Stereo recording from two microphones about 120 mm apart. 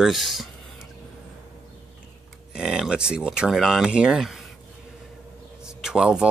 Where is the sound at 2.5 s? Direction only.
5° right (ahead or behind).